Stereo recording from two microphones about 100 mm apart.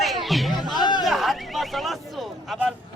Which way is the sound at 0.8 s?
45° left (ahead or behind).